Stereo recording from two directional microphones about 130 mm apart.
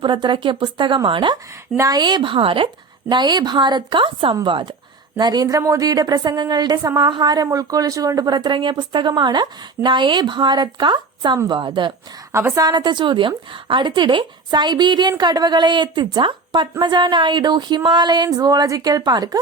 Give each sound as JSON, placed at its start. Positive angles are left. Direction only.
{"t": 0.0, "sound": "a woman's voice", "side_deg": -35}
{"t": 1.7, "sound": "a woman's voice", "side_deg": -25}
{"t": 12.3, "sound": "a woman's voice", "side_deg": -20}
{"t": 12.6, "sound": "a woman's voice", "side_deg": -35}